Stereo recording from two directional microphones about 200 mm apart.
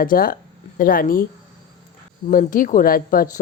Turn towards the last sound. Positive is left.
turn(degrees=45)  # may be behind; listen again after turning